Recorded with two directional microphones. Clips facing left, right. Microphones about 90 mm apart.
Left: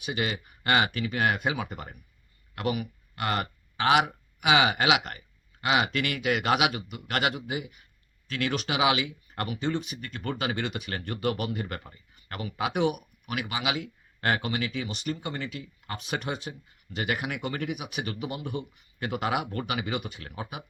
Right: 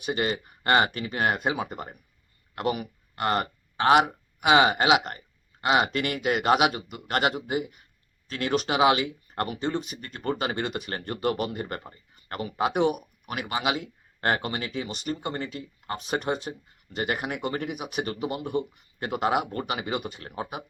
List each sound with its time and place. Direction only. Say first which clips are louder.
0.0 s speech: right 3 dB; 35° right (ahead or behind)